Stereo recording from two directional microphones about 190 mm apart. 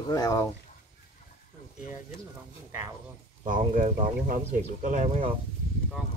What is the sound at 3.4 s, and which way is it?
Speech, 45° right (ahead or behind).